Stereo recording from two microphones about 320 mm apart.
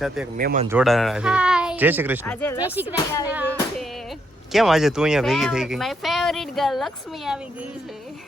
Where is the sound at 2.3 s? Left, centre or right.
Centre.